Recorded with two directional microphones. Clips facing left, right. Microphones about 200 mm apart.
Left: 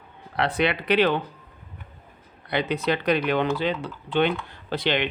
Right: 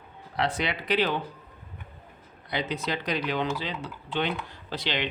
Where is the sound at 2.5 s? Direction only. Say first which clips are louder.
Left 6 dB; 60° left (ahead or behind).